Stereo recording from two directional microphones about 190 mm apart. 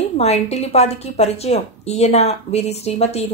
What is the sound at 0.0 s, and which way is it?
A woman's voice, 35° left (ahead or behind).